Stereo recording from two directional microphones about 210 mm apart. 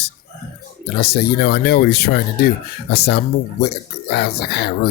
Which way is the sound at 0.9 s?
50° left (ahead or behind).